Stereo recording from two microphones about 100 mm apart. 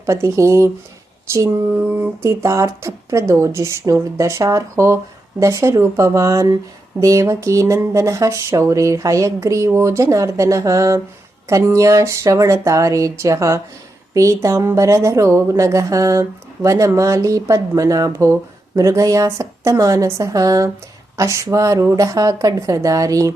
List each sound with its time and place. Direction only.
0.0 s speech: 30° right (ahead or behind)